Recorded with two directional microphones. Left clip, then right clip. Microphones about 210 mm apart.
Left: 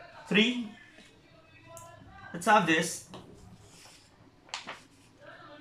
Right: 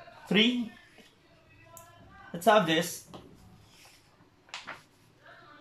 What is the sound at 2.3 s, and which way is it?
Speech, 15° right (ahead or behind).